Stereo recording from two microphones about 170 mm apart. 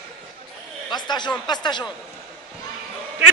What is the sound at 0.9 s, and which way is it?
Speech, 25° left (ahead or behind).